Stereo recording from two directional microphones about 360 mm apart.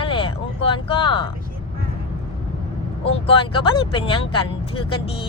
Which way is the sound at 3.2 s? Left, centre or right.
Centre.